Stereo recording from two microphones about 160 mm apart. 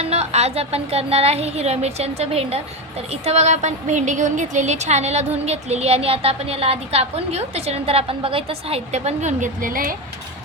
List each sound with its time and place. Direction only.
0.0 s a woman's voice: 40° right (ahead or behind); by 9.9 s 60° right (ahead or behind)